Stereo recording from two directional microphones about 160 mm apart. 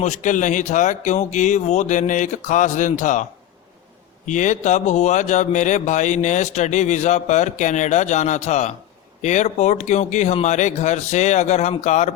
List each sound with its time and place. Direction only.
0.0 s speech: 50° left (ahead or behind)
4.3 s speech: 50° left (ahead or behind)